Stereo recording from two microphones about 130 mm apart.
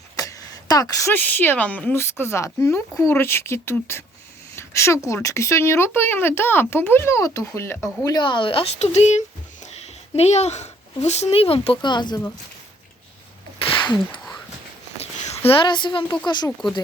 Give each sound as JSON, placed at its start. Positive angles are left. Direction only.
{"t": 0.2, "sound": "a sound", "side_deg": 25}
{"t": 1.1, "sound": "speech", "side_deg": 15}
{"t": 8.1, "sound": "speech", "side_deg": 35}
{"t": 11.8, "sound": "a woman's voice", "side_deg": 35}
{"t": 13.6, "sound": "a sound", "side_deg": 40}
{"t": 15.4, "sound": "a woman's voice", "side_deg": 40}